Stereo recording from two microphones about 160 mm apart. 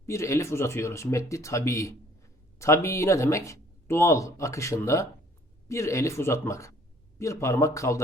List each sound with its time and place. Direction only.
0.0 s speech: 20° left (ahead or behind)